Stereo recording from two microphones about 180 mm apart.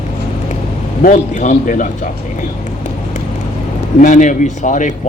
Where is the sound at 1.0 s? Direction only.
45° left (ahead or behind).